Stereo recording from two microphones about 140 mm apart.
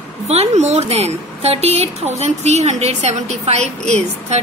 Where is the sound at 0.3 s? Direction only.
50° right (ahead or behind).